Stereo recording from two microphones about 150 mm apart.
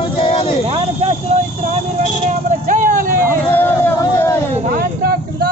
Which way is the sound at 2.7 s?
65° right (ahead or behind).